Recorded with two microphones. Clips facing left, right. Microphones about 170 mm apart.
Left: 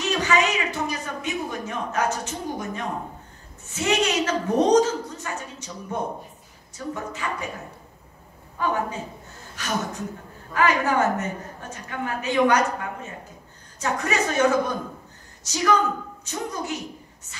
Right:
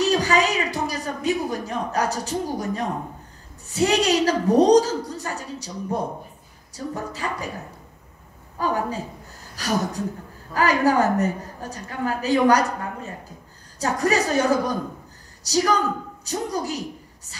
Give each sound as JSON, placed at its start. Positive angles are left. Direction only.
{"t": 0.0, "sound": "a sound", "side_deg": -35}
{"t": 3.6, "sound": "a woman's voice", "side_deg": -35}
{"t": 8.5, "sound": "a woman's voice", "side_deg": -35}